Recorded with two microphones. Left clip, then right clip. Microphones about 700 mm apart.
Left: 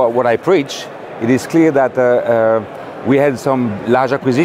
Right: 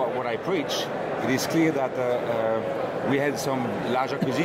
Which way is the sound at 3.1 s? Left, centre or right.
Left.